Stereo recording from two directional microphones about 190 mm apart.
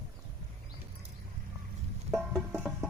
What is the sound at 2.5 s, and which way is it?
Music, 5° right (ahead or behind).